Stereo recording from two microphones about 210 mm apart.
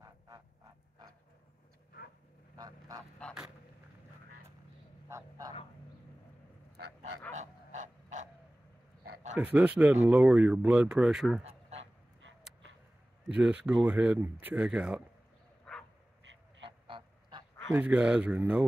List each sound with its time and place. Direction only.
2.5 s goose: 15° right (ahead or behind)
3.2 s goose: 5° left (ahead or behind)
5.0 s a sound: 15° right (ahead or behind)
7.3 s a sound: 35° right (ahead or behind)
9.4 s speech: 5° right (ahead or behind)
11.4 s a sound: 30° right (ahead or behind)
13.3 s speech: 5° right (ahead or behind)
15.7 s bow-wow: centre (ahead or behind)
16.6 s duck: 25° right (ahead or behind)
17.7 s speech: 5° right (ahead or behind)